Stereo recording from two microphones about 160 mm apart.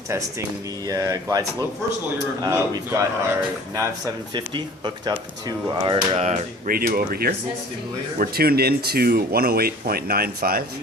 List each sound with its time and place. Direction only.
0.9 s speech: 20° right (ahead or behind)
6.7 s speech: 65° right (ahead or behind)